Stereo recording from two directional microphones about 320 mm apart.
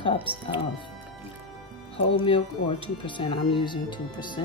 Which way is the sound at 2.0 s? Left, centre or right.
Centre.